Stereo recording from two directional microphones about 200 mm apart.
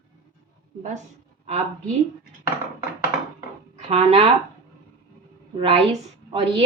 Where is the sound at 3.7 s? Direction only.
30° right (ahead or behind).